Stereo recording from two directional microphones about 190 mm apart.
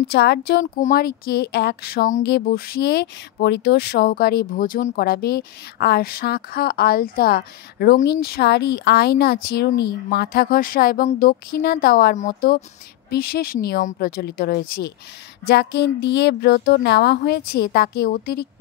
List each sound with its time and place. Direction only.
0.0 s speech: 60° left (ahead or behind)